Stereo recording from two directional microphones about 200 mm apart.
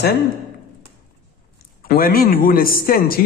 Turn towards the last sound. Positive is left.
turn(degrees=45)  # may be behind; listen again after turning